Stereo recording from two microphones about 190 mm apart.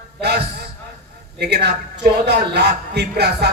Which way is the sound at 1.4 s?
60° right (ahead or behind).